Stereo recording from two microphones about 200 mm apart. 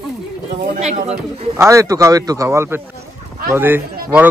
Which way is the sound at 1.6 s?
15° right (ahead or behind).